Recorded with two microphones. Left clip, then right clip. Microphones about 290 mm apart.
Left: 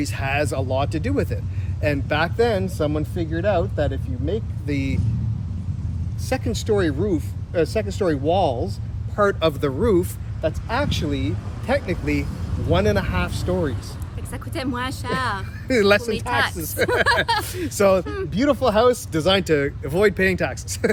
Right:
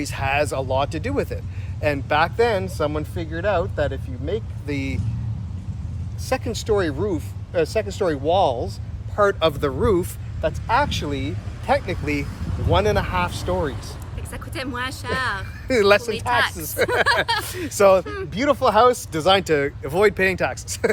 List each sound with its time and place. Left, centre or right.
0.0 s speech: centre
6.2 s speech: centre
14.3 s speech: centre
15.6 s speech: centre
16.3 s speech: centre
16.6 s speech: centre
18.0 s speech: centre
18.3 s speech: centre